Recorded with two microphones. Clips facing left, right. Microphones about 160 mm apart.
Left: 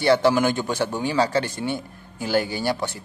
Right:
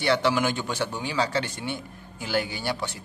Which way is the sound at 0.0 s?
40° left (ahead or behind).